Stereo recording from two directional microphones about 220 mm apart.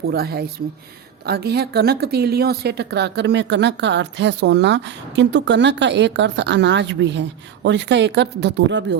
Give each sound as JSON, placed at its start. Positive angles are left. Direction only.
{"t": 0.0, "sound": "a woman's voice", "side_deg": -45}